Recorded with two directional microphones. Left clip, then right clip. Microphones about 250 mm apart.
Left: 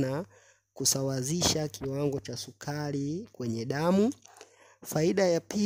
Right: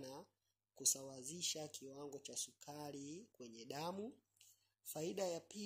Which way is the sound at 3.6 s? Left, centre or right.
Left.